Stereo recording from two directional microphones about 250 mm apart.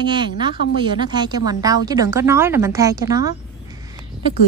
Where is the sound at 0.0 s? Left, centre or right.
Centre.